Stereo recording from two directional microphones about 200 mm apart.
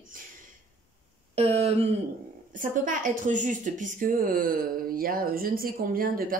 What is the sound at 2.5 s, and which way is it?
A woman's voice, 40° right (ahead or behind).